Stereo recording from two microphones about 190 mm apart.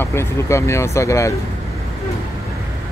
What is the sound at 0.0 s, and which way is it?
Speech, 15° left (ahead or behind).